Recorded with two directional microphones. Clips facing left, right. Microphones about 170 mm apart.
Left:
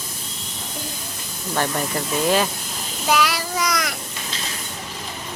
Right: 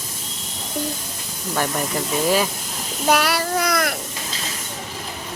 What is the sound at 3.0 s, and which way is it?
Child singing, 55° right (ahead or behind).